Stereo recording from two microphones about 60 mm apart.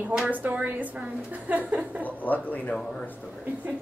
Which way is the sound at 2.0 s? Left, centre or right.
Left.